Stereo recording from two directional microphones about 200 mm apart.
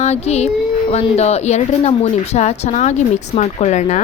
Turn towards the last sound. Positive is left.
turn(degrees=35)  # may be behind; listen again after turning